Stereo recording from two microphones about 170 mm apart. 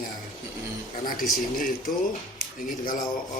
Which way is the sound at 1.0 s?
55° left (ahead or behind).